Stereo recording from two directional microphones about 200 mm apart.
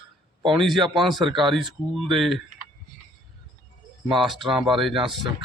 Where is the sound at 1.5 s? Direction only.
Centre (ahead or behind).